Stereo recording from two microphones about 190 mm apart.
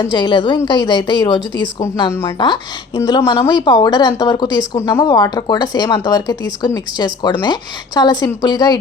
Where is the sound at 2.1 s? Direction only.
15° left (ahead or behind).